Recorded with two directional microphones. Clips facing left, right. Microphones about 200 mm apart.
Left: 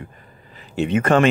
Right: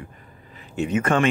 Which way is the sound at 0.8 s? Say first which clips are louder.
Left 4 dB; 70° left (ahead or behind).